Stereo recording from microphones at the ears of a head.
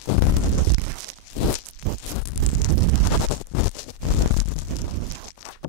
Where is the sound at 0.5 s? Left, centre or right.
Right.